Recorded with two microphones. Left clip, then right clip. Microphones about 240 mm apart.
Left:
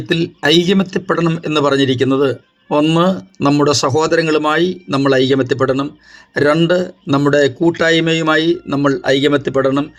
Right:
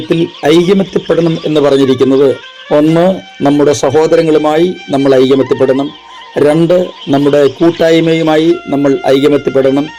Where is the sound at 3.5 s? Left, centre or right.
Centre.